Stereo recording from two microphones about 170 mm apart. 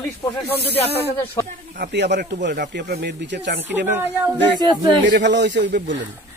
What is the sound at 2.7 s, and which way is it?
Speech, 75° right (ahead or behind).